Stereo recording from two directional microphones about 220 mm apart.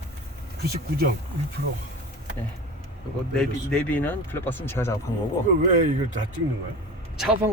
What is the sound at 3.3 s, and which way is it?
Speech, 5° left (ahead or behind).